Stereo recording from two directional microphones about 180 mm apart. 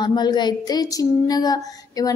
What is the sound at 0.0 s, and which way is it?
Female singing, 25° left (ahead or behind).